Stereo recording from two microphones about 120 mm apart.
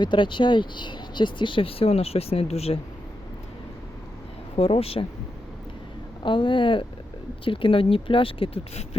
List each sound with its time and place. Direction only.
0.0 s speech: 40° left (ahead or behind); by 2.8 s 60° left (ahead or behind)
4.5 s speech: 55° left (ahead or behind)
6.2 s speech: 40° left (ahead or behind); by 9.0 s 60° left (ahead or behind)